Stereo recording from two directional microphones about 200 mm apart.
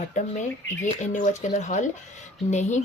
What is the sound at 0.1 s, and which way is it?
Speech, 35° left (ahead or behind).